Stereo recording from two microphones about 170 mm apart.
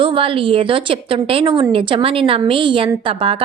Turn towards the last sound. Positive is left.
turn(degrees=-35)  # may be behind; listen again after turning